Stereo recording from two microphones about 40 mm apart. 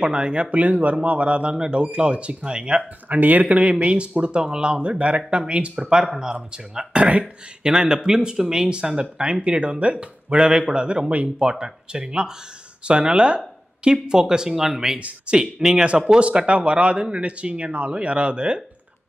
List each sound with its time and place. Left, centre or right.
0.0 s speech: right
0.5 s speech: right
3.1 s speech: right
3.4 s speech: right; by 15.0 s centre
15.0 s speech: right
15.3 s speech: right